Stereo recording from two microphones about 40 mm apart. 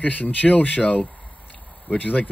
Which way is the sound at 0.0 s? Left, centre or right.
Left.